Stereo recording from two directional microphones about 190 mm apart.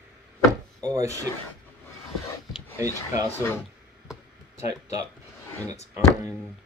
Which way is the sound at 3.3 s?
15° left (ahead or behind).